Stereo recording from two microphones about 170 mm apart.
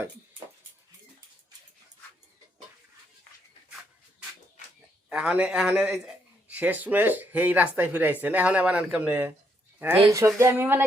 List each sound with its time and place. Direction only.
5.0 s a man's voice: 5° right (ahead or behind)